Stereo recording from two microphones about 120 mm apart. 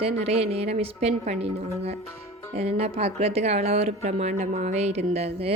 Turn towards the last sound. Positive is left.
turn(degrees=-60)  # may be behind; listen again after turning